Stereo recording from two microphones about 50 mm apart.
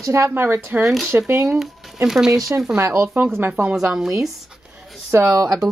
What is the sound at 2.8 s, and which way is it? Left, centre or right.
Speech, right.